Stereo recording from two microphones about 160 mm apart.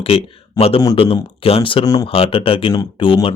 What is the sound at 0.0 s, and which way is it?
Speech, 35° left (ahead or behind).